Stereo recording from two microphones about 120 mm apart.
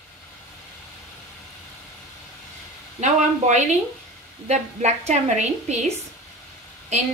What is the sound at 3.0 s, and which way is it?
Speech, 80° right.